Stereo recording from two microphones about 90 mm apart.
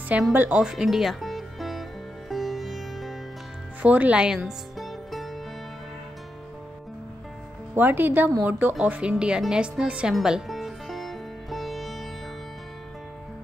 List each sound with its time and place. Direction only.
0.3 s speech: 20° right (ahead or behind)
0.6 s music: 5° right (ahead or behind)
3.8 s music: 15° right (ahead or behind); by 5.3 s centre (ahead or behind)
7.7 s speech: 20° right (ahead or behind)
10.1 s sitar: 5° right (ahead or behind)